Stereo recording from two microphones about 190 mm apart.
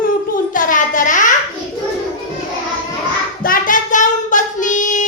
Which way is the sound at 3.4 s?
45° left (ahead or behind).